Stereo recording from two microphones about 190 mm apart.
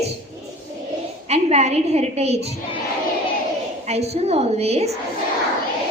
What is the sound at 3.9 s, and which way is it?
A woman's voice, 35° right (ahead or behind).